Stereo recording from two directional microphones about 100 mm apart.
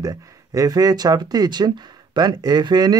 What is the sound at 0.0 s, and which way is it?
Speech, 35° right (ahead or behind).